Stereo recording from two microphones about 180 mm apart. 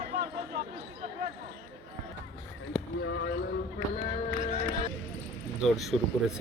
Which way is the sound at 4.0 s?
40° left (ahead or behind).